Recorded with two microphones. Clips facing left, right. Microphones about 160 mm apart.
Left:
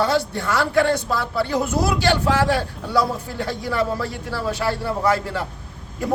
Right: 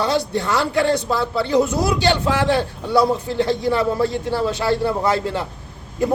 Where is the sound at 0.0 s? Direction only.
20° right (ahead or behind).